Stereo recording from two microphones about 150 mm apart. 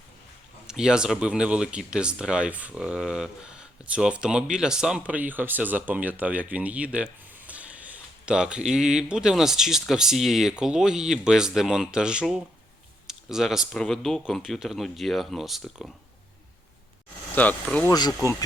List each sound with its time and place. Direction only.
0.7 s speech: 5° right (ahead or behind)
17.3 s speech: 10° left (ahead or behind)
17.9 s speech: 25° left (ahead or behind)